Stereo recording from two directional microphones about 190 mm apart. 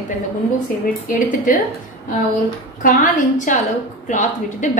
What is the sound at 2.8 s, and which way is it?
A woman's voice, 45° left (ahead or behind).